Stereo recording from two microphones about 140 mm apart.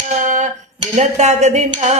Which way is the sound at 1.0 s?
55° right (ahead or behind).